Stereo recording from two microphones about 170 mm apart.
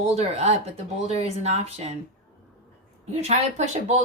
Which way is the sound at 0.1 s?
40° right (ahead or behind).